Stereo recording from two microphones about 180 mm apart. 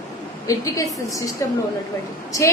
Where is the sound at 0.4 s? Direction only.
20° left (ahead or behind).